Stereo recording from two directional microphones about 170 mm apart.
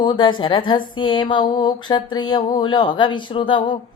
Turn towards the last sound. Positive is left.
turn(degrees=30)  # may be behind; listen again after turning